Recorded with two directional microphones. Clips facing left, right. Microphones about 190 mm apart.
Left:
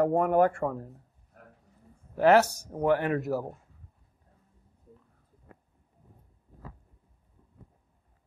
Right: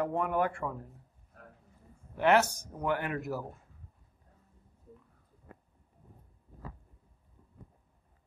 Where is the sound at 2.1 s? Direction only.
35° left (ahead or behind).